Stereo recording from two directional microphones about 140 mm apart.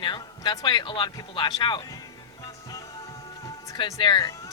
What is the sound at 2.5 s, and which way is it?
Music, 25° left (ahead or behind).